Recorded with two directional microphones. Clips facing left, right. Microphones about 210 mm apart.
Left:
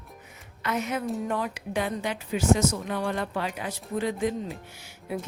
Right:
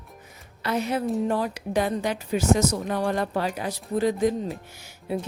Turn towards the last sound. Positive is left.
turn(degrees=-30)  # may be behind; listen again after turning